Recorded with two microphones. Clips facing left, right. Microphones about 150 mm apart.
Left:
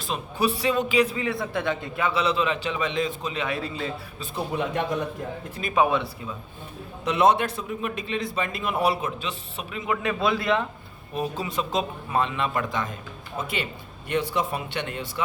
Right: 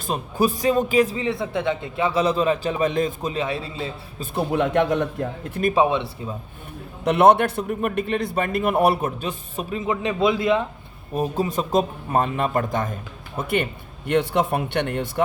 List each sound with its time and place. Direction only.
0.0 s a man's voice: 45° right (ahead or behind)
1.1 s a man's voice: 25° right (ahead or behind)
2.1 s a man's voice: 40° right (ahead or behind)
4.4 s speech: 65° right (ahead or behind)
5.7 s a man's voice: 25° right (ahead or behind)
7.0 s a man's voice: 60° right (ahead or behind); by 9.9 s 40° right (ahead or behind)
9.9 s a man's voice: 20° right (ahead or behind)
11.1 s a man's voice: 45° right (ahead or behind); by 15.2 s 60° right (ahead or behind)